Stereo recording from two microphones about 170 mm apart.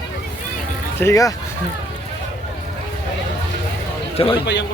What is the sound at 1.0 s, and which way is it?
Speech, 20° left (ahead or behind).